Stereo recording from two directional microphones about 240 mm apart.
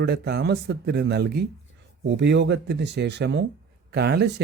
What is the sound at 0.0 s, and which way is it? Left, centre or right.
A man's voice, right.